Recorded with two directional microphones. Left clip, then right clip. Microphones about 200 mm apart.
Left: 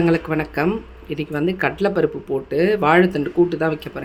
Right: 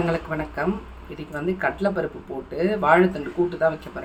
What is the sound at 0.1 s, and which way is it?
Speech, 55° left (ahead or behind).